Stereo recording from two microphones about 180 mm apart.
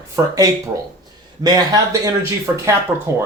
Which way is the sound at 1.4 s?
20° right (ahead or behind).